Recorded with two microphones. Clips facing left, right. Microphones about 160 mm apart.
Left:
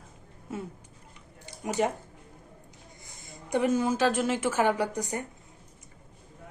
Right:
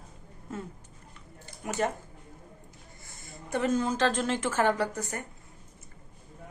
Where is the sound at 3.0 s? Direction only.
15° left (ahead or behind).